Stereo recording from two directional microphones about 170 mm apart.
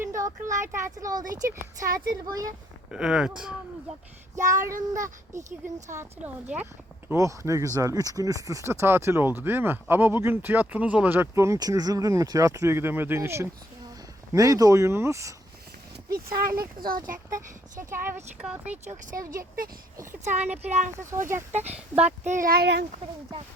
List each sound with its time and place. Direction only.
0.0 s speech: 20° right (ahead or behind)
1.2 s speech: 50° right (ahead or behind)
2.9 s speech: 5° right (ahead or behind)
4.4 s speech: 50° right (ahead or behind)
4.9 s speech: 15° right (ahead or behind)
16.6 s speech: 60° right (ahead or behind)
17.2 s speech: 20° right (ahead or behind)
19.3 s speech: 55° right (ahead or behind)
20.2 s speech: 40° right (ahead or behind)
21.1 s speech: 15° right (ahead or behind)
21.5 s speech: 40° right (ahead or behind); by 22.9 s 75° right (ahead or behind)